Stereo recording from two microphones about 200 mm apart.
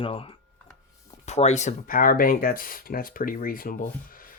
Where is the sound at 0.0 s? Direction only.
25° left (ahead or behind).